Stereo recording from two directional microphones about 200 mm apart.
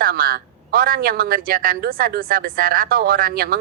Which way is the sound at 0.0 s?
45° right (ahead or behind).